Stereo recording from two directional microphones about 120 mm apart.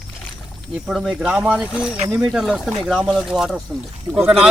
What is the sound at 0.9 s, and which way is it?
Speech, 5° right (ahead or behind).